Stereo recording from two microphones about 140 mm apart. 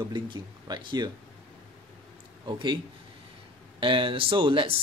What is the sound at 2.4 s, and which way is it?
Speech, 35° right (ahead or behind).